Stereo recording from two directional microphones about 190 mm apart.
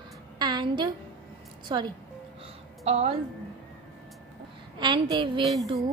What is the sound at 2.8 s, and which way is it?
Speech, 30° right (ahead or behind).